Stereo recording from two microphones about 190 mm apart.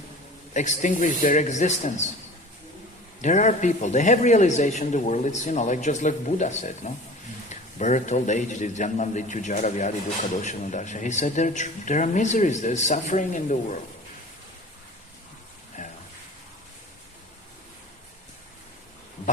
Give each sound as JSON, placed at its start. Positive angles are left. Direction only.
{"t": 0.5, "sound": "a man's voice", "side_deg": 40}
{"t": 3.2, "sound": "a man's voice", "side_deg": 40}
{"t": 15.8, "sound": "a sound", "side_deg": 40}